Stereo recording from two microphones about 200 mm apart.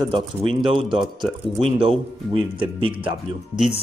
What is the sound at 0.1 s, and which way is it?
Speech, 25° right (ahead or behind).